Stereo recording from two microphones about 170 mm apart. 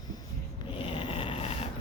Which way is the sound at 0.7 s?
30° left (ahead or behind).